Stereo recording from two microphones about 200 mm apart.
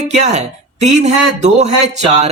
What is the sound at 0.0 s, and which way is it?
Speech, 35° right (ahead or behind).